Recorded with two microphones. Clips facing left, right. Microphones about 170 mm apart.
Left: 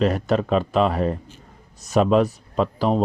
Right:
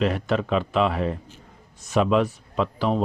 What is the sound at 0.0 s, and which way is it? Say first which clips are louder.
Speech: left 3 dB; 40° left (ahead or behind).